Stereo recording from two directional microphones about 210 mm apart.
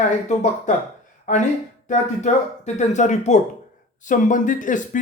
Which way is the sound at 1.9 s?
35° left (ahead or behind).